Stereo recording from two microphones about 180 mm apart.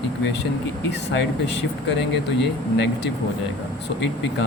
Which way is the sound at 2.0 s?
75° left (ahead or behind).